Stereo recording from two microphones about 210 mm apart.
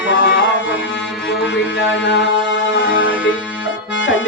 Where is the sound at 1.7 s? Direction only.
60° left (ahead or behind).